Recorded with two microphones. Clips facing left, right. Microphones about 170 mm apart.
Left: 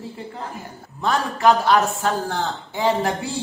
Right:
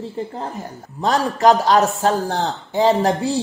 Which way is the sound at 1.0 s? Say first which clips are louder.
Right 4 dB; 40° right (ahead or behind).